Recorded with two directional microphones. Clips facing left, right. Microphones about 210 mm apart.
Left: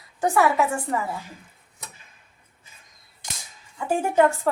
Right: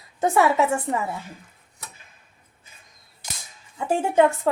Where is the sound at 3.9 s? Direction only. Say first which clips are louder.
Right 1 dB; 20° right (ahead or behind).